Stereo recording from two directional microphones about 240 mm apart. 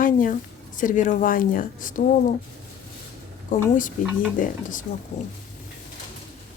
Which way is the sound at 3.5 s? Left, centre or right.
Left.